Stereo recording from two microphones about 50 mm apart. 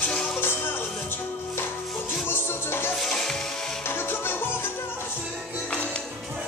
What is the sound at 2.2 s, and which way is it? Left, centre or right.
Music, left.